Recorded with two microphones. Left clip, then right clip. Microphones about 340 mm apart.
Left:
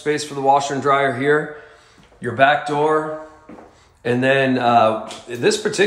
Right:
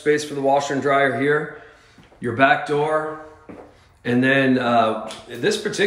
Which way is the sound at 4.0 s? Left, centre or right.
Centre.